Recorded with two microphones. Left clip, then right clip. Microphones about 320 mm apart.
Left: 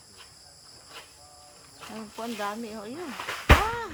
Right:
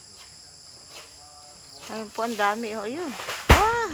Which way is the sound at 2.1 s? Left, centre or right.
Right.